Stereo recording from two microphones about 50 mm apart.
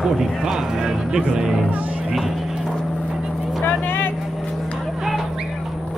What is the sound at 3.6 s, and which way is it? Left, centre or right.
Vehicle, left.